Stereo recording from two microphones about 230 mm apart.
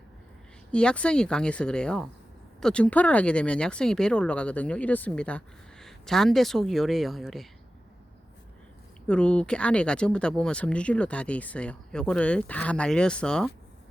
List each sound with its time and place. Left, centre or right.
0.7 s speech: centre
9.0 s speech: centre